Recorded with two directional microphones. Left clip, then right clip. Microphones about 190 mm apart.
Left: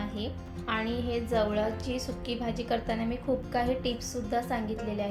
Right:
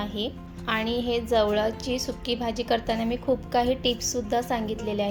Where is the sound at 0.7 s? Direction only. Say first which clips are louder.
Right 5 dB; 40° right (ahead or behind).